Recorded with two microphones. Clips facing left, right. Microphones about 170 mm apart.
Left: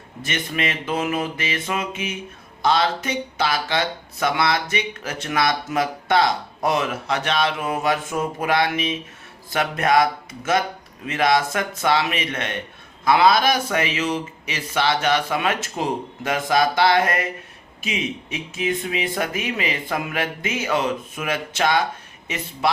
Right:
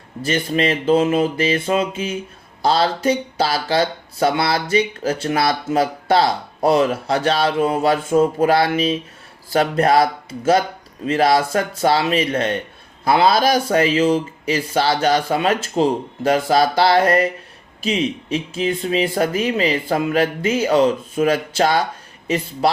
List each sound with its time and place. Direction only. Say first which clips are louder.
0.2 s speech: right 7 dB; 30° right (ahead or behind)